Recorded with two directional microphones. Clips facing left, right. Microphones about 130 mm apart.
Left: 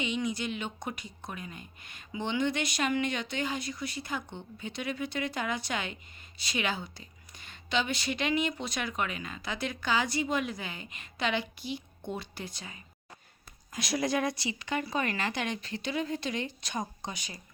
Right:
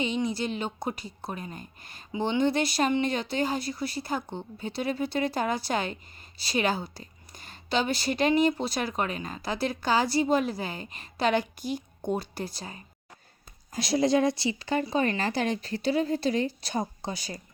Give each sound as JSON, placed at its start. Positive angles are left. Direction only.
{"t": 0.0, "sound": "a woman's voice", "side_deg": -30}